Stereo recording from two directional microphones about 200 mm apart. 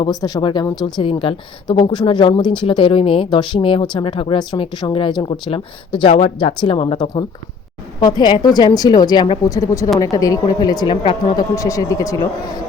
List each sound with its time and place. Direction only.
0.0 s speech: 20° left (ahead or behind)